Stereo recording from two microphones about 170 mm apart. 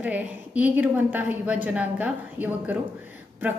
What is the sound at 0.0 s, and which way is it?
A woman's voice, 10° right (ahead or behind).